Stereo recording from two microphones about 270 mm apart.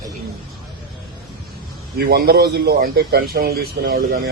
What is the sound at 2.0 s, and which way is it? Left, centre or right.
A man's voice, right.